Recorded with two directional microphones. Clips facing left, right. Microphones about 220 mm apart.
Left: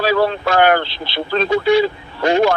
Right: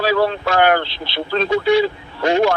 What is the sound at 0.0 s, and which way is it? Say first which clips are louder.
Speech: left 1 dB; 45° left (ahead or behind).